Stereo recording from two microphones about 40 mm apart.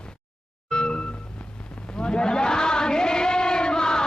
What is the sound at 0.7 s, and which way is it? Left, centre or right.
Music, centre.